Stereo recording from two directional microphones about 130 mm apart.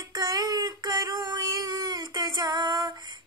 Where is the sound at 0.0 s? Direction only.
30° right (ahead or behind).